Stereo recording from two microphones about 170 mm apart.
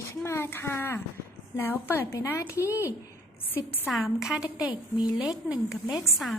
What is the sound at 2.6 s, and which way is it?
Speech, 10° right (ahead or behind).